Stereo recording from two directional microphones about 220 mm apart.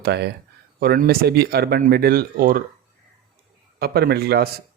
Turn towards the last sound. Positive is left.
turn(degrees=-45)  # may be behind; listen again after turning